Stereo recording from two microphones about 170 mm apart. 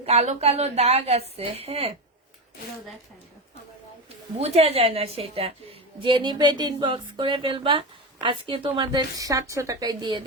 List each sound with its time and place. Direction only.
0.0 s a woman's voice: 40° right (ahead or behind)
4.4 s a woman's voice: 35° right (ahead or behind)